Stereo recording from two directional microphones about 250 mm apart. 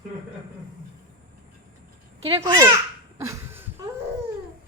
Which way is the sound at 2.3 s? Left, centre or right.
Centre.